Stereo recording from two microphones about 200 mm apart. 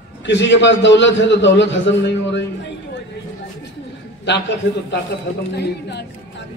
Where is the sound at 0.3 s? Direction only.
60° left (ahead or behind).